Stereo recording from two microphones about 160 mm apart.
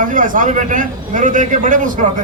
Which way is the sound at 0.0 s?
55° right (ahead or behind).